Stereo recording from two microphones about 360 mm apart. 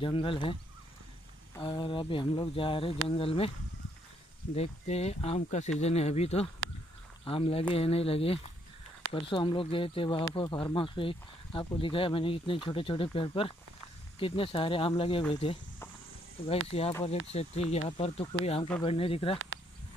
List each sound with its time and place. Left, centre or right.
0.0 s speech: centre
4.6 s speech: centre
16.4 s speech: centre